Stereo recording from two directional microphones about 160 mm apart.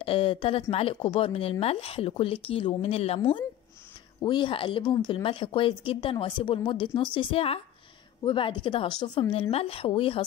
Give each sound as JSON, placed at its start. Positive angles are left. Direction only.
{"t": 0.0, "sound": "speech", "side_deg": 35}